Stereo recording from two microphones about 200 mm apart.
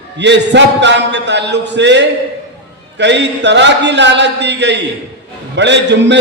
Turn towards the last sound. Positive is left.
turn(degrees=-60)  # may be behind; listen again after turning